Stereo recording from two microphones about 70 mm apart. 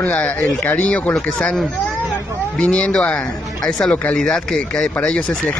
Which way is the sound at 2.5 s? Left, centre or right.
Centre.